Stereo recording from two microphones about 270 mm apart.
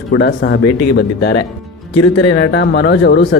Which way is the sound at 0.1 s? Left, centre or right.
Left.